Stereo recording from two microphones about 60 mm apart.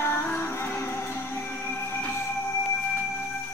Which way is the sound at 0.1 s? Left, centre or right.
Left.